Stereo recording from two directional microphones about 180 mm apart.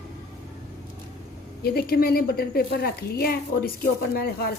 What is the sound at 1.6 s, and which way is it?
A woman's voice, 60° left (ahead or behind).